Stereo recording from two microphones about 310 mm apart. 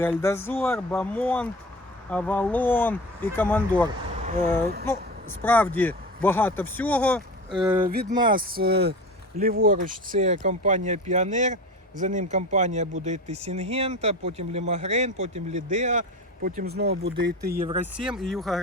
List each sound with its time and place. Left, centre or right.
0.0 s speech: centre
4.2 s a sound: right
5.4 s speech: centre
7.8 s speech: right
18.0 s speech: centre